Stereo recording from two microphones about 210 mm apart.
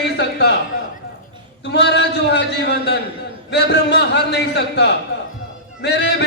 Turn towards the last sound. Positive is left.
turn(degrees=55)  # may be behind; listen again after turning